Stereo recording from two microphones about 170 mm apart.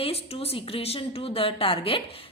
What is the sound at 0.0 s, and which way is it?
A woman's voice, 35° left (ahead or behind).